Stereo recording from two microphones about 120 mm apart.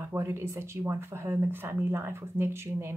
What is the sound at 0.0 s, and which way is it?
Speech, 20° right (ahead or behind).